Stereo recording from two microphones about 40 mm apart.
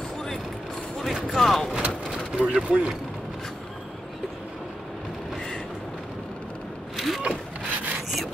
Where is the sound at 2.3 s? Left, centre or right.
Right.